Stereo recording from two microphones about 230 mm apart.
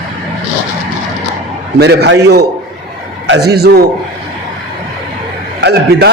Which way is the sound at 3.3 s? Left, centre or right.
Right.